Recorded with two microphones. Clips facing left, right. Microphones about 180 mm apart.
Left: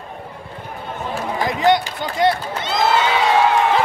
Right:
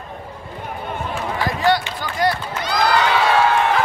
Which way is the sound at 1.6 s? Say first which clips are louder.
Left 3 dB; 20° left (ahead or behind).